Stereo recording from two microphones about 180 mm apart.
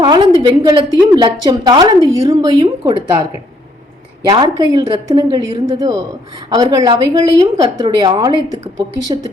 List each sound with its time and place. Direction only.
0.0 s a woman's voice: 25° right (ahead or behind)
4.3 s a woman's voice: 25° right (ahead or behind)